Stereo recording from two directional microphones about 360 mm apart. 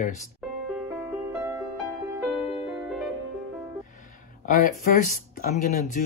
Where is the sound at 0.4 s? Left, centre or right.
Centre.